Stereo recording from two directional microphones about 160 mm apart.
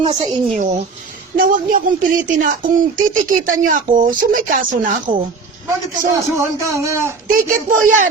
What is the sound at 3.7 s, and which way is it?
Speech, 55° right (ahead or behind).